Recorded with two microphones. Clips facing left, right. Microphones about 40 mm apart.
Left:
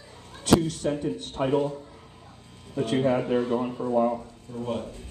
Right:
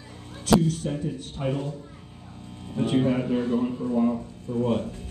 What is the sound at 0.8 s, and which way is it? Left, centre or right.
Speech, left.